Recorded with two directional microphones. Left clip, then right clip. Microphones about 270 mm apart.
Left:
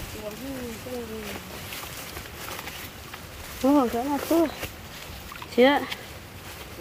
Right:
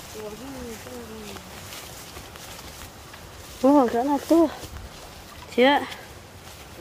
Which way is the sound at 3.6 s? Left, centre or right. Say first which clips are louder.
Right 4 dB; centre.